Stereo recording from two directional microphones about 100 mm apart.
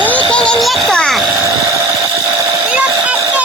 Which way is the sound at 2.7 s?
15° right (ahead or behind).